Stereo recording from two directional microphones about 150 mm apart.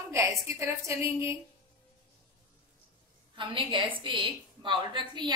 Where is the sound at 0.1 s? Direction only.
20° right (ahead or behind).